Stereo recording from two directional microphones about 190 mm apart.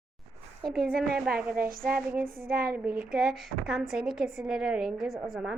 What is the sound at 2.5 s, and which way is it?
Speech, 50° right (ahead or behind).